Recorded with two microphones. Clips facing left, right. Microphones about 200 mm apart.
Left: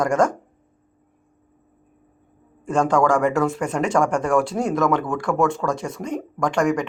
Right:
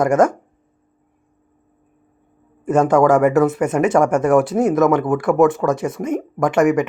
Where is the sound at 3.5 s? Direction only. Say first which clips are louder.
Right 5 dB; 5° right (ahead or behind).